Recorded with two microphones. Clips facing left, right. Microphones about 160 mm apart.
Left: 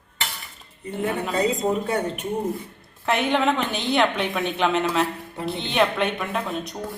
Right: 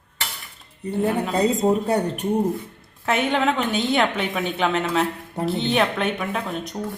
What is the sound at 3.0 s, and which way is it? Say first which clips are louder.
A woman's voice: even; centre (ahead or behind).